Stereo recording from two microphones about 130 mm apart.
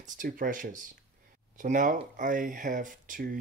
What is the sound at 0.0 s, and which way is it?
Speech, 90° right.